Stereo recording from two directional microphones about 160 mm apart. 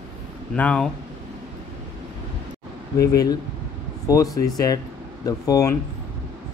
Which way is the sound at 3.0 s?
20° left (ahead or behind).